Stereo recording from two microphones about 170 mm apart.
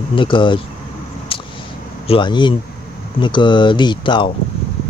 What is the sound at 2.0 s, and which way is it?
Speech, 30° left (ahead or behind).